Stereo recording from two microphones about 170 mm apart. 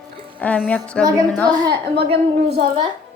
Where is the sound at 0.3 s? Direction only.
10° left (ahead or behind).